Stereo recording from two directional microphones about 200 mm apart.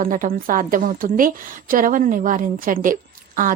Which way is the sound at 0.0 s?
45° right (ahead or behind).